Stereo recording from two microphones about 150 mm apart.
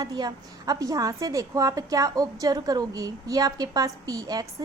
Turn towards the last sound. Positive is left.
turn(degrees=-25)  # may be behind; listen again after turning